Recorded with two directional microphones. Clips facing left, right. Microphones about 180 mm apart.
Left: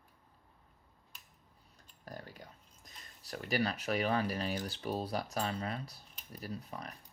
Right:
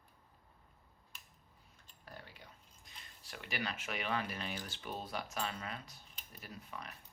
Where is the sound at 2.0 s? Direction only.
40° left (ahead or behind).